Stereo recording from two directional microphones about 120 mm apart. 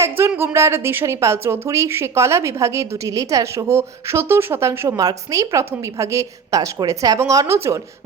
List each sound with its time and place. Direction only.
0.0 s a woman's voice: 20° right (ahead or behind)